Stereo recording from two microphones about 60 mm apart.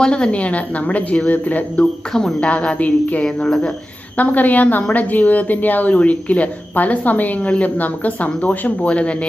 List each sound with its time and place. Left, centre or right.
0.0 s a woman's voice: centre
2.1 s speech: centre
2.5 s a woman's voice: left